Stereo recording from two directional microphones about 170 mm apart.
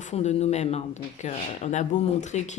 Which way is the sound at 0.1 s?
40° left (ahead or behind).